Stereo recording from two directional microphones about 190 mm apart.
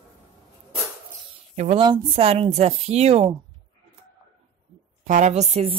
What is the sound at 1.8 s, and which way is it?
Speech, 25° right (ahead or behind).